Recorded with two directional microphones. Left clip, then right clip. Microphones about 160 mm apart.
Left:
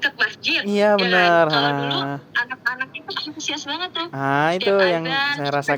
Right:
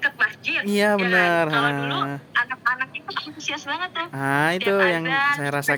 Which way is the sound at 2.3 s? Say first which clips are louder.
Right 1 dB; 40° left (ahead or behind).